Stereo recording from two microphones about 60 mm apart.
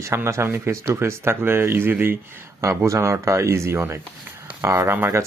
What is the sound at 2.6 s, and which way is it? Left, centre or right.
Speech, right.